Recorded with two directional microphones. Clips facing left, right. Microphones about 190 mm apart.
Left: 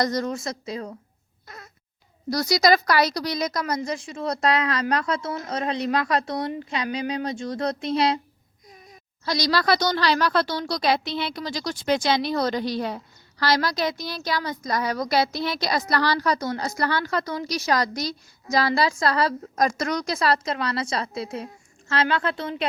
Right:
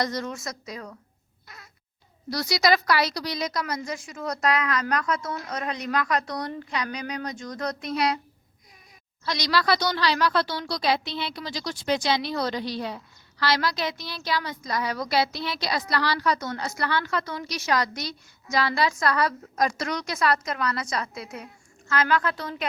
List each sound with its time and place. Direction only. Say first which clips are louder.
0.0 s speech: left 4 dB; 40° left (ahead or behind)
2.3 s a woman's voice: left 3 dB; 40° left (ahead or behind)
3.8 s a woman's voice: left 4 dB; 30° left (ahead or behind)
9.2 s a woman's voice: left 2 dB; 35° left (ahead or behind)
19.5 s a woman's voice: left 3 dB; 45° left (ahead or behind); by 22.6 s 25° left (ahead or behind)